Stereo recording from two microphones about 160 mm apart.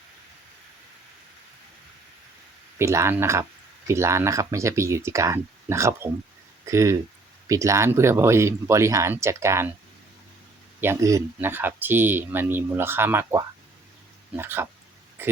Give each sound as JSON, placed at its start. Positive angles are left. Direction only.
{"t": 2.7, "sound": "speech", "side_deg": -15}
{"t": 10.8, "sound": "speech", "side_deg": -15}